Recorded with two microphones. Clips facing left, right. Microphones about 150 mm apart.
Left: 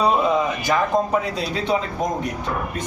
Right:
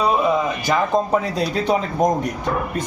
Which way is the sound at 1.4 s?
45° right (ahead or behind).